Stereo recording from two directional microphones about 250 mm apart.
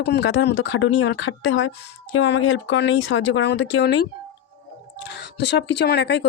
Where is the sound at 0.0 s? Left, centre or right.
Left.